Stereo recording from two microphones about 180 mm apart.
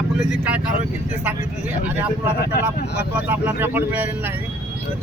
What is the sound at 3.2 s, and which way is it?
Speech, 10° right (ahead or behind).